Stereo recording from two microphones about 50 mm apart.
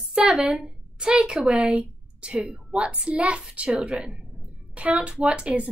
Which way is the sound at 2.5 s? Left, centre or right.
Right.